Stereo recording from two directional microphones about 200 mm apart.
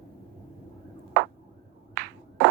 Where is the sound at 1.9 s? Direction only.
60° right (ahead or behind).